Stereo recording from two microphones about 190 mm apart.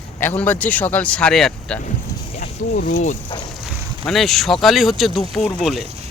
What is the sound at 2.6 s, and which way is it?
Speech, 45° left (ahead or behind).